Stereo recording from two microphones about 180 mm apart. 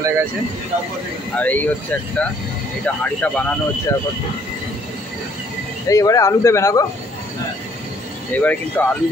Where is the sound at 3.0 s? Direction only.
10° left (ahead or behind).